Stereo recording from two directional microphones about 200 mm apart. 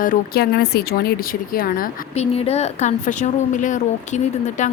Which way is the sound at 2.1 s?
30° left (ahead or behind).